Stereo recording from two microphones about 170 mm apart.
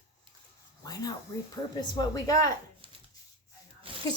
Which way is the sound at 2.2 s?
20° left (ahead or behind).